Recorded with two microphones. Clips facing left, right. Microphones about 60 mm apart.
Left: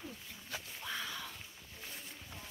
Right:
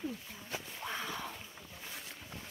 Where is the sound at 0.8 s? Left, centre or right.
Right.